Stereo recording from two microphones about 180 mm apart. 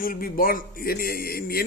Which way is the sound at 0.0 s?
55° left (ahead or behind).